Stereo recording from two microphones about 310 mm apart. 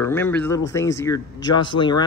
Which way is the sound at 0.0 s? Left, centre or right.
Centre.